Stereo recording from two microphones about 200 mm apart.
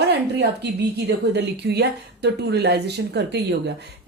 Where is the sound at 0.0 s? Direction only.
55° right (ahead or behind).